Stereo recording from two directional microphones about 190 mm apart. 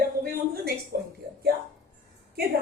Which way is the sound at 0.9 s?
55° right (ahead or behind).